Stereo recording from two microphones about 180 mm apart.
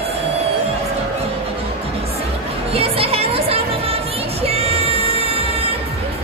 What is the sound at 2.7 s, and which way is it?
Music, 35° right (ahead or behind).